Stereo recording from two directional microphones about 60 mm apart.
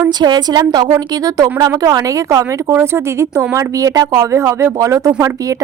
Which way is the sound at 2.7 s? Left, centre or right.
Right.